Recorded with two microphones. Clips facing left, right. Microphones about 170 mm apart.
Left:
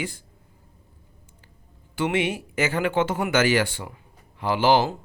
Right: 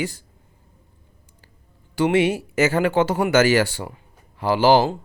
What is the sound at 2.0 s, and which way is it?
Speech, 40° right (ahead or behind).